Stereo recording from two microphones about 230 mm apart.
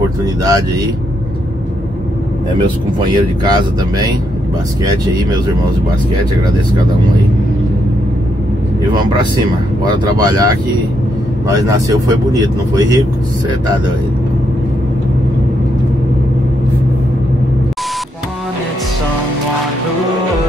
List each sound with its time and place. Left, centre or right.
0.2 s speech: centre
3.2 s speech: centre
9.8 s speech: centre
11.4 s speech: centre